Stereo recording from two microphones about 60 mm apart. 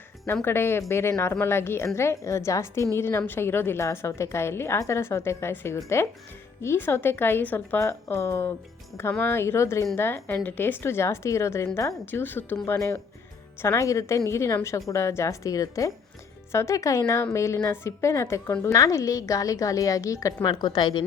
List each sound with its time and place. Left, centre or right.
0.4 s a woman's voice: left
3.8 s a woman's voice: left
7.8 s a woman's voice: left
12.2 s a woman's voice: left
12.6 s a woman's voice: left
13.8 s a woman's voice: left
16.5 s a woman's voice: left
18.7 s a woman's voice: left